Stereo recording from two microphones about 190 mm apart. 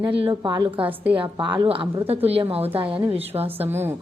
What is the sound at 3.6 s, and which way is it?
Speech, 10° right (ahead or behind).